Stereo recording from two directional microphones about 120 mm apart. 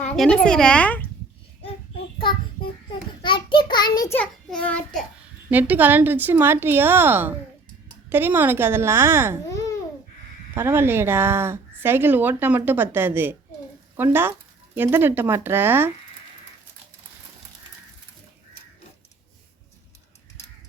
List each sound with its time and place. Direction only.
0.2 s a woman's voice: 5° left (ahead or behind)
3.2 s child singing: 40° left (ahead or behind)
4.4 s a child's voice: 10° left (ahead or behind)
5.5 s a woman's voice: 15° right (ahead or behind)
10.5 s a woman's voice: 20° right (ahead or behind)